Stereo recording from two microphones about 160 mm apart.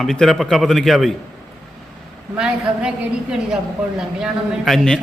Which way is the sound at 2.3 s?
5° right (ahead or behind).